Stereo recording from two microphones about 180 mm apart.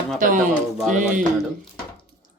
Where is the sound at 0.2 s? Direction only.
50° right (ahead or behind).